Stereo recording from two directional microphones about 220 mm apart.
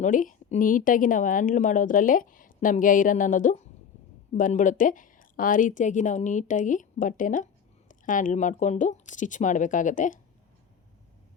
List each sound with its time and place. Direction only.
0.0 s a woman's voice: 35° left (ahead or behind)